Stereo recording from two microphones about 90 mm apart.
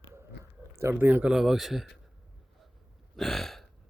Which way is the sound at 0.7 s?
30° right (ahead or behind).